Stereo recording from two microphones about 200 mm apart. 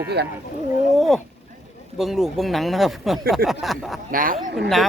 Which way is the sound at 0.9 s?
Centre (ahead or behind).